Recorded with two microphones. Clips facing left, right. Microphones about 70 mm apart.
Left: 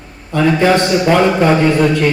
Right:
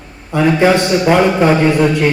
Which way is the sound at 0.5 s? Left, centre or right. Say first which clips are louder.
Right 1 dB; centre.